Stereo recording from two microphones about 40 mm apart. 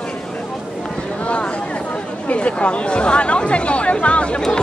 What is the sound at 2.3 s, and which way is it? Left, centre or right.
Speech, left.